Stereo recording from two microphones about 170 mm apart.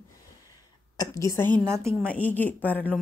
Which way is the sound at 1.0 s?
20° left (ahead or behind).